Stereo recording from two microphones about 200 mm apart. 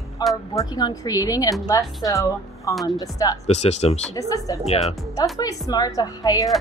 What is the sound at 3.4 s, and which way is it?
Speech, 35° left (ahead or behind).